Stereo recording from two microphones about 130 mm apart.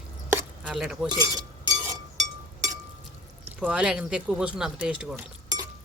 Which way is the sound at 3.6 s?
5° right (ahead or behind).